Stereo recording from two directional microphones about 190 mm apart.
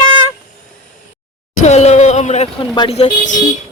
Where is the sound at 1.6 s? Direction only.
35° left (ahead or behind).